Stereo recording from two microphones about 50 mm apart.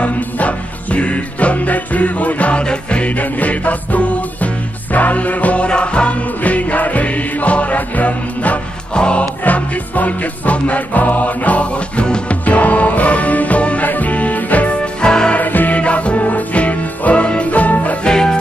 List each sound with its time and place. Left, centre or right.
0.0 s music: left
8.9 s music: centre
9.4 s music: left
15.0 s music: centre
15.3 s music: left
18.0 s music: centre